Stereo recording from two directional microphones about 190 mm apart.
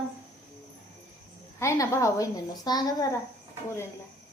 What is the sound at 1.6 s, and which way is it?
A woman's voice, 15° left (ahead or behind).